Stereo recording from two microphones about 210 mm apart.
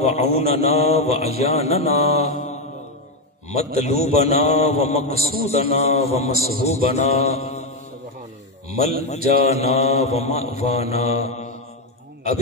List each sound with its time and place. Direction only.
0.0 s mantra: 30° left (ahead or behind)
5.1 s a man's voice: 45° right (ahead or behind)
5.5 s mantra: 30° left (ahead or behind)
9.0 s mantra: 30° left (ahead or behind)